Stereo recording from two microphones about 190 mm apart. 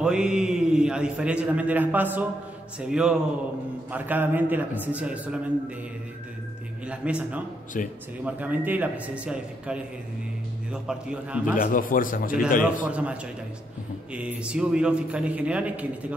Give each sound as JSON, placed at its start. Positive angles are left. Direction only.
{"t": 0.0, "sound": "a man's voice", "side_deg": -5}
{"t": 6.9, "sound": "a man's voice", "side_deg": -5}
{"t": 7.7, "sound": "speech", "side_deg": 45}
{"t": 8.2, "sound": "a man's voice", "side_deg": -10}
{"t": 11.5, "sound": "speech", "side_deg": 45}
{"t": 12.8, "sound": "a man's voice", "side_deg": -5}